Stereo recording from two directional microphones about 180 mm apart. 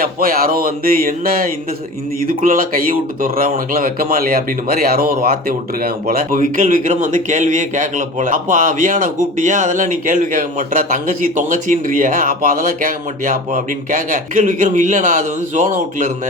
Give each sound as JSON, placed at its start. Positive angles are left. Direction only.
{"t": 0.0, "sound": "speech", "side_deg": -55}